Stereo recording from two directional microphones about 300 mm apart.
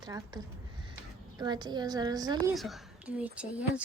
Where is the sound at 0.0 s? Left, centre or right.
Centre.